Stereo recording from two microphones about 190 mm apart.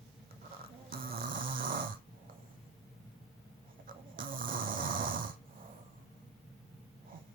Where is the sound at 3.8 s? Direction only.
45° right (ahead or behind).